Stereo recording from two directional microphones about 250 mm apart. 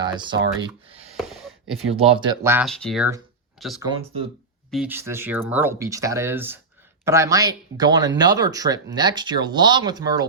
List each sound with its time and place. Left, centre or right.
0.0 s speech: centre
1.1 s a sound: centre
1.9 s speech: right; by 3.1 s centre
3.8 s speech: centre
4.7 s speech: centre